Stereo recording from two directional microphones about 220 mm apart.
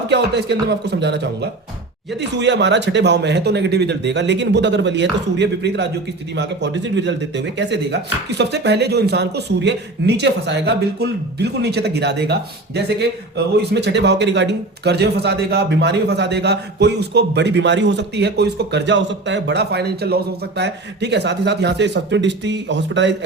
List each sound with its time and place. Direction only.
0.1 s speech: 50° right (ahead or behind)